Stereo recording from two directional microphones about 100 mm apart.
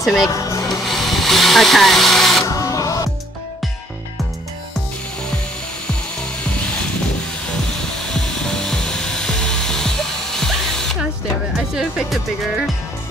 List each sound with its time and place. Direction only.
0.0 s speech: centre (ahead or behind)
0.3 s speech: 30° left (ahead or behind)
0.8 s dental drill: centre (ahead or behind)
2.4 s printer: 35° left (ahead or behind)
7.8 s music: 5° left (ahead or behind)
11.5 s speech: 5° right (ahead or behind)